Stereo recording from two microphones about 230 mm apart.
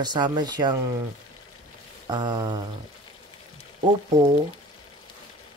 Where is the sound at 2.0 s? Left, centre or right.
Centre.